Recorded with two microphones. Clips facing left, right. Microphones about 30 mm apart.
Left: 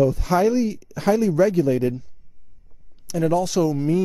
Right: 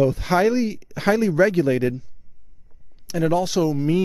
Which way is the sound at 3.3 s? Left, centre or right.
Right.